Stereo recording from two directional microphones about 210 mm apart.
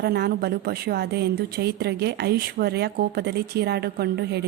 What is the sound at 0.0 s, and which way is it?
A woman's voice, 50° right (ahead or behind).